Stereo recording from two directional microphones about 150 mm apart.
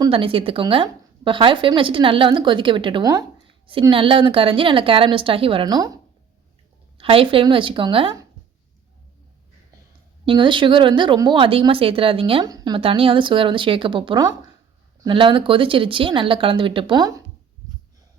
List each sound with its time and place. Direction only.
0.0 s a woman's voice: 35° right (ahead or behind)
3.4 s a woman's voice: 35° right (ahead or behind)
7.0 s a woman's voice: 35° right (ahead or behind)
10.2 s a woman's voice: 35° right (ahead or behind)
12.5 s a woman's voice: 25° right (ahead or behind)